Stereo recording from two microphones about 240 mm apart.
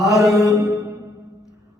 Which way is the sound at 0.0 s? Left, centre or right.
Centre.